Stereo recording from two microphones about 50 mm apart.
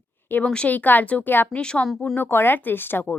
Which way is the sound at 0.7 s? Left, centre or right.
Left.